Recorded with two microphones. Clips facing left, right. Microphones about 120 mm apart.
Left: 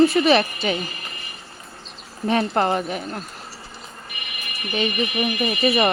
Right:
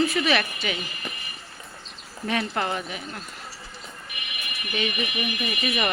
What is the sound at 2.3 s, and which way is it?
Speech, 40° left (ahead or behind).